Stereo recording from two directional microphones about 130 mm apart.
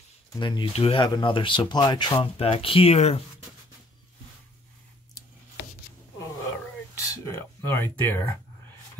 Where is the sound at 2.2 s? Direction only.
45° left (ahead or behind).